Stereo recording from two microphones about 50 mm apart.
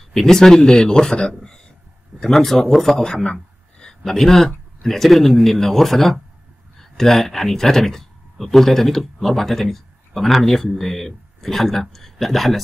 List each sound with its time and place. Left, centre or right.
0.1 s speech: centre
2.1 s speech: centre